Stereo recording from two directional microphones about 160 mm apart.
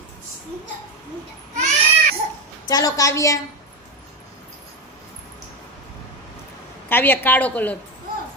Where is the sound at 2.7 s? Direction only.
20° left (ahead or behind).